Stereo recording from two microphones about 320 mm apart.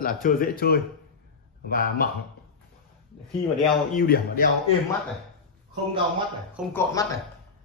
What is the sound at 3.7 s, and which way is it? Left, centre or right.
Speech, left.